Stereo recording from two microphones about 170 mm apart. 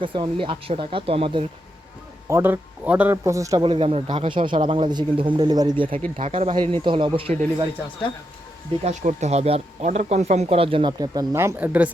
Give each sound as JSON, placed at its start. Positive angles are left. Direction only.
{"t": 0.0, "sound": "speech", "side_deg": -30}
{"t": 2.3, "sound": "speech", "side_deg": -10}
{"t": 3.6, "sound": "a man's voice", "side_deg": -35}
{"t": 8.8, "sound": "speech", "side_deg": -45}